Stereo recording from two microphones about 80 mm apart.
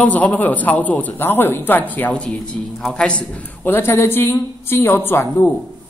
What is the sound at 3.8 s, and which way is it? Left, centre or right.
Speech, left.